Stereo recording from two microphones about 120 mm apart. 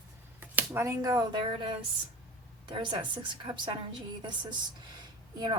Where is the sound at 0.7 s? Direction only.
25° right (ahead or behind).